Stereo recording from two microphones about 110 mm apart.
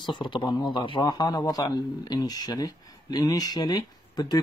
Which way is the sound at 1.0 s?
35° left (ahead or behind).